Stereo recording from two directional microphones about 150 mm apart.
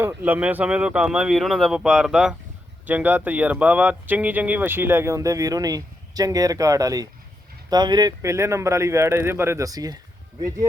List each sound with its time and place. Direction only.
0.0 s a man's voice: 15° right (ahead or behind)